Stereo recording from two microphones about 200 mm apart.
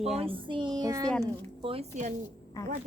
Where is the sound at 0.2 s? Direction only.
25° right (ahead or behind).